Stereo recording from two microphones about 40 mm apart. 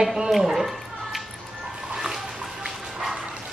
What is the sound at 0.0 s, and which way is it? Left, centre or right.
Speech, centre.